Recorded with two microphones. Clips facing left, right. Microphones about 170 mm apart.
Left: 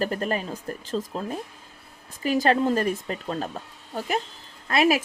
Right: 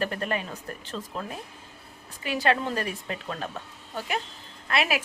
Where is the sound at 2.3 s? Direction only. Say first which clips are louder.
Left 5 dB; 40° left (ahead or behind).